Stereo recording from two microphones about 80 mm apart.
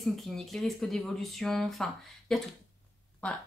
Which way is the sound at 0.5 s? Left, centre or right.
Centre.